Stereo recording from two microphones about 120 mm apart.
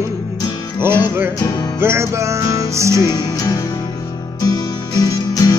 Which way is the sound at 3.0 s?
35° left (ahead or behind).